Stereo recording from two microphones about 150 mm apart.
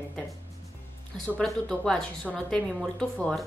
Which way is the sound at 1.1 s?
5° left (ahead or behind).